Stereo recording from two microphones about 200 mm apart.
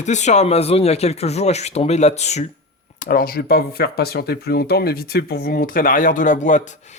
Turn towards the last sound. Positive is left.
turn(degrees=40)  # may be behind; listen again after turning